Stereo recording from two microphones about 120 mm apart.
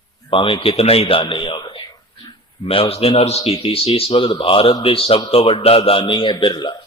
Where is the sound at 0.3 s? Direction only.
45° left (ahead or behind).